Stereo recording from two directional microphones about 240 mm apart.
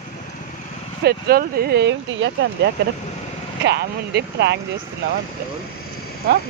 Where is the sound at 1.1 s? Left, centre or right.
Right.